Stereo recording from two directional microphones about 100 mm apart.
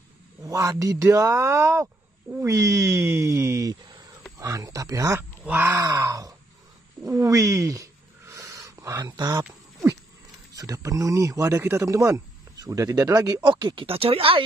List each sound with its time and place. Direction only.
0.5 s speech: 35° right (ahead or behind)
5.4 s speech: 20° right (ahead or behind)
5.8 s groan: 35° right (ahead or behind)
7.1 s speech: 35° right (ahead or behind)
8.3 s a sound: 30° right (ahead or behind)
10.5 s speech: 35° right (ahead or behind)
13.4 s speech: 45° right (ahead or behind)
13.8 s speech: 70° right (ahead or behind)